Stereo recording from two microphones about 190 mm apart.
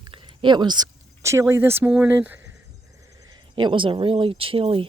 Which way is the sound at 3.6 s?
25° right (ahead or behind).